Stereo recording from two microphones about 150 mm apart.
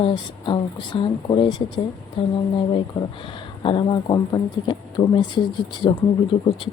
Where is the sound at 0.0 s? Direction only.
30° left (ahead or behind).